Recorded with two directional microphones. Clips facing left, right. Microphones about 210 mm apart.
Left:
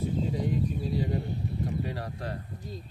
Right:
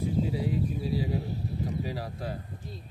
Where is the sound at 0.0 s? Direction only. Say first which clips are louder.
Right 1 dB; 5° right (ahead or behind).